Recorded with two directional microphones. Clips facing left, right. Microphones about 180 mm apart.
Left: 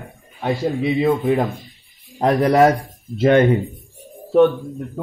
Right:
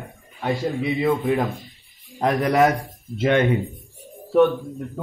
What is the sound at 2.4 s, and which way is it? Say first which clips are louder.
Speech: left 4 dB; 35° left (ahead or behind).